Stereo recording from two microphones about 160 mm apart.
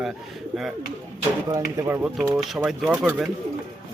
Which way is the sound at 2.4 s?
Centre (ahead or behind).